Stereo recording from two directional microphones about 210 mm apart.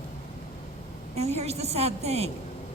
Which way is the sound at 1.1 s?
30° right (ahead or behind).